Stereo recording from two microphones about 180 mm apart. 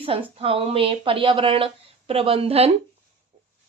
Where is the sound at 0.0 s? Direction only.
30° right (ahead or behind).